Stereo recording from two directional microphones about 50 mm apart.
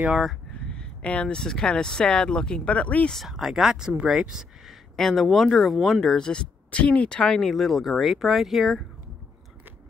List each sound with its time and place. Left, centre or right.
0.1 s speech: centre
0.5 s speech: centre
3.3 s speech: centre
4.9 s speech: centre
6.1 s speech: centre